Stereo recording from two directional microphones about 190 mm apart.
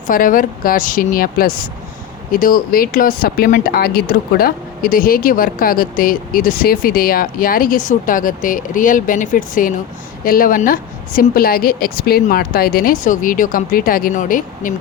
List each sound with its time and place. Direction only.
0.1 s speech: 45° left (ahead or behind)